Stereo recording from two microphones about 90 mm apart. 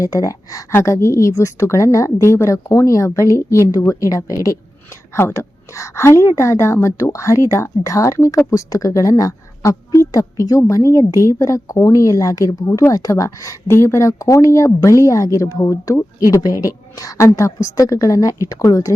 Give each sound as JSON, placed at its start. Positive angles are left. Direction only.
{"t": 0.0, "sound": "a woman's voice", "side_deg": 40}
{"t": 0.7, "sound": "a woman's voice", "side_deg": 30}